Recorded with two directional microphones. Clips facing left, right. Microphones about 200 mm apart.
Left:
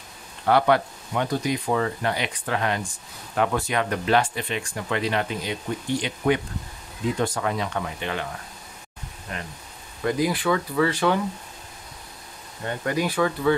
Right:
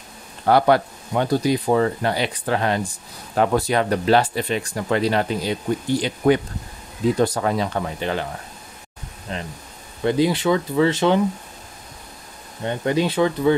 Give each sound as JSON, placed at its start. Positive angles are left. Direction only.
{"t": 0.5, "sound": "speech", "side_deg": -35}
{"t": 9.3, "sound": "speech", "side_deg": -25}
{"t": 12.6, "sound": "speech", "side_deg": -25}